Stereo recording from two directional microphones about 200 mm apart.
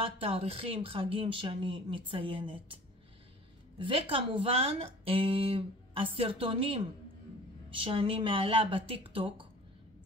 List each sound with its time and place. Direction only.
0.0 s speech: 30° right (ahead or behind)
7.8 s speech: 25° right (ahead or behind)